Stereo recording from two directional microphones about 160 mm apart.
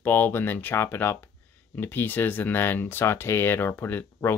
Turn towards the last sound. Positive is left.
turn(degrees=10)  # may be behind; listen again after turning